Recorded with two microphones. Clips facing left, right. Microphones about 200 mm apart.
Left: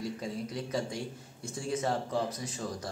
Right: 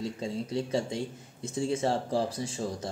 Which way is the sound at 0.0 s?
25° right (ahead or behind).